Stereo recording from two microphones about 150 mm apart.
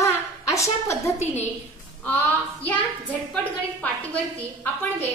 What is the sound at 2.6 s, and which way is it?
Speech, 10° left (ahead or behind).